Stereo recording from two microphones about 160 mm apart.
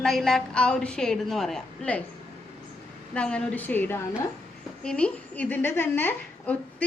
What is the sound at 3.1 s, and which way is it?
A woman's voice, 5° left (ahead or behind).